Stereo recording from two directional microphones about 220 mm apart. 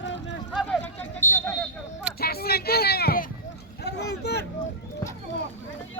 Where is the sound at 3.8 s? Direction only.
50° left (ahead or behind).